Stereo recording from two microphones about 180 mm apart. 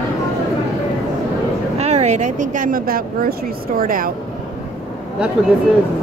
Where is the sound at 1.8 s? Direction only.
35° right (ahead or behind).